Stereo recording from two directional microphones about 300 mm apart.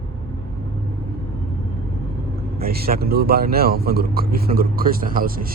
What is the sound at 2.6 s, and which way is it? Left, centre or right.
Speech, right.